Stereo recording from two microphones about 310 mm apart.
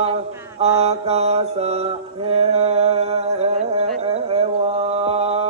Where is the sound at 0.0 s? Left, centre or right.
Centre.